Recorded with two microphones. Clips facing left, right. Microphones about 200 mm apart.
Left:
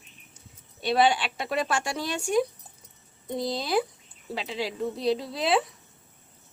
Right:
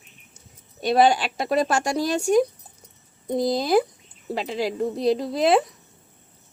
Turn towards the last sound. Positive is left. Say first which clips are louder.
# right 6 dB
turn(degrees=-45)  # may be behind; listen again after turning